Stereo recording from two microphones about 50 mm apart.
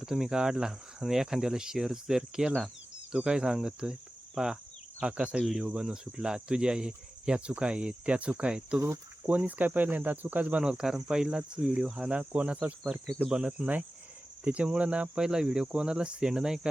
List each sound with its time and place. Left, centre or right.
0.0 s speech: centre
4.9 s speech: right
5.4 s speech: centre
9.2 s speech: right; by 16.6 s centre